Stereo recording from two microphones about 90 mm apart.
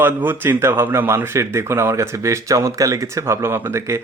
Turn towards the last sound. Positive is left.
turn(degrees=-30)  # may be behind; listen again after turning